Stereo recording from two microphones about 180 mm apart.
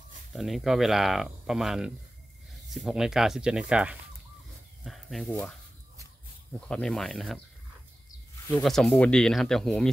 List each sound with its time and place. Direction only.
0.3 s speech: centre (ahead or behind)
4.8 s a sound: centre (ahead or behind)
5.3 s speech: 5° left (ahead or behind)
6.7 s speech: 5° left (ahead or behind)
8.5 s speech: centre (ahead or behind)